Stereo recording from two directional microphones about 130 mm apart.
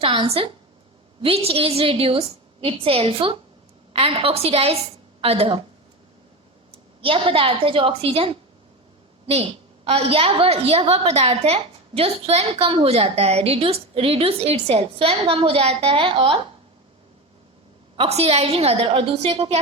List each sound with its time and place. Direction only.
0.0 s a woman's voice: 45° right (ahead or behind)
6.7 s a woman's voice: 45° right (ahead or behind)
17.9 s a woman's voice: 50° right (ahead or behind)